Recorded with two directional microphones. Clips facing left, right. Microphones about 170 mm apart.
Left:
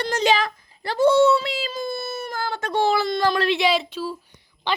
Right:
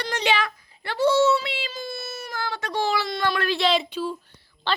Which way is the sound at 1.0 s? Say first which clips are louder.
Left 3 dB; 50° left (ahead or behind).